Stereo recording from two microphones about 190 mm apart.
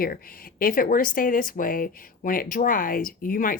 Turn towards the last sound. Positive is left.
turn(degrees=45)  # may be behind; listen again after turning